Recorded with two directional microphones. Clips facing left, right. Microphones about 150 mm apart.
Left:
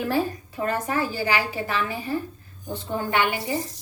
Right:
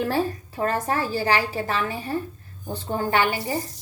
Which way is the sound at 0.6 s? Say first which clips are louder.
Right 1 dB; 40° right (ahead or behind).